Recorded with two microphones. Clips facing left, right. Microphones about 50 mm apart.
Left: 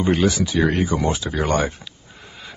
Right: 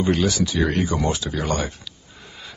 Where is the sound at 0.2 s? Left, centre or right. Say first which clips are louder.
Left 2 dB; centre.